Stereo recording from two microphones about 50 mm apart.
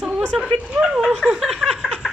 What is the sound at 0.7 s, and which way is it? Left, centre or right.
Speech, right.